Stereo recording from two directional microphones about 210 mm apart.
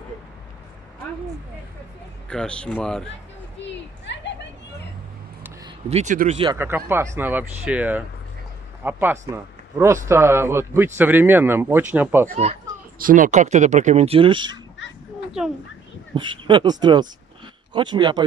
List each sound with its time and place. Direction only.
2.2 s speech: 5° left (ahead or behind)
3.6 s a sound: 55° left (ahead or behind)
5.9 s speech: 35° right (ahead or behind)
6.5 s a man's voice: 10° right (ahead or behind)
12.3 s speech: 30° right (ahead or behind)
16.2 s speech: 20° right (ahead or behind)